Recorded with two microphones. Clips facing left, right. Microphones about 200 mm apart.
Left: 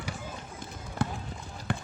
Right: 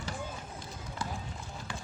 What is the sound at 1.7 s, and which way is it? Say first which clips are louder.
Basketball bounce: left 10 dB; 60° left (ahead or behind).